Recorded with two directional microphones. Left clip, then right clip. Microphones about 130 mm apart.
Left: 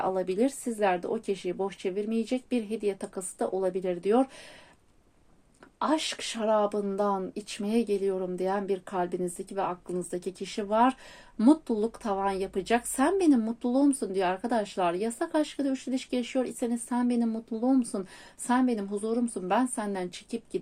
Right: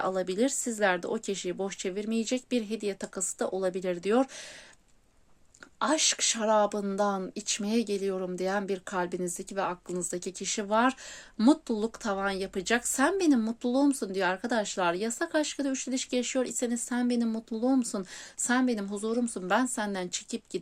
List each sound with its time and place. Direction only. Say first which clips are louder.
0.0 s speech: left 1 dB; 50° right (ahead or behind)
5.8 s speech: right 2 dB; 55° right (ahead or behind)